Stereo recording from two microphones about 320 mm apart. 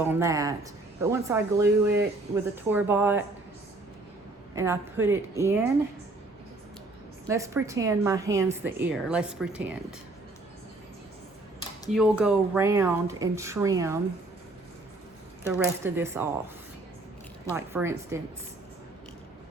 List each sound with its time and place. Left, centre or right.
0.0 s a woman's voice: centre
4.5 s a woman's voice: centre
7.3 s a woman's voice: centre
11.9 s a woman's voice: centre
15.5 s a woman's voice: centre
17.5 s a woman's voice: centre